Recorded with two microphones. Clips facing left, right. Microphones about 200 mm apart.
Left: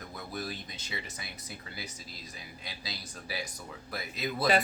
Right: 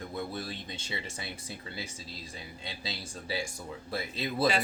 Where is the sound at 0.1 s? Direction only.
25° right (ahead or behind).